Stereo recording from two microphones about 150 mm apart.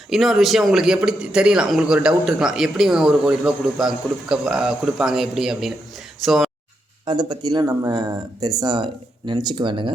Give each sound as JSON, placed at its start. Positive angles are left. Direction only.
{"t": 0.1, "sound": "a man's voice", "side_deg": 0}
{"t": 7.0, "sound": "speech", "side_deg": -30}